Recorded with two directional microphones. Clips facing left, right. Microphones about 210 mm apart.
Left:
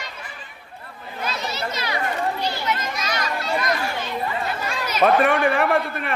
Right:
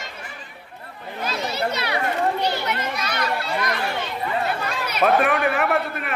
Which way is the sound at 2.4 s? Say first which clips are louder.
Right 1 dB; 65° right (ahead or behind).